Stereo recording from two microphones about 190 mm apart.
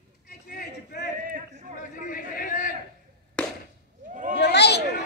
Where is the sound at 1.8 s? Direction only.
45° left (ahead or behind).